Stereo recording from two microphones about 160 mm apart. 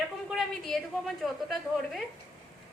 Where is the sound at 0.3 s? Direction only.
Centre (ahead or behind).